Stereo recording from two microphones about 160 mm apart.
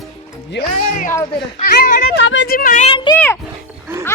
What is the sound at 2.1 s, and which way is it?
Speech, 80° left.